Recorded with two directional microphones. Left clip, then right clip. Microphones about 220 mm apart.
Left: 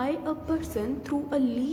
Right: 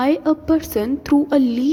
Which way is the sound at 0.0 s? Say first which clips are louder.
Right 11 dB; 40° right (ahead or behind).